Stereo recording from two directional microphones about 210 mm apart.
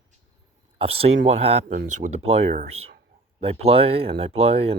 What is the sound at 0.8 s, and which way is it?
Speech, 25° right (ahead or behind).